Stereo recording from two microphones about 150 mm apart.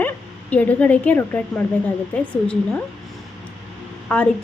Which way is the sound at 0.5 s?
10° left (ahead or behind).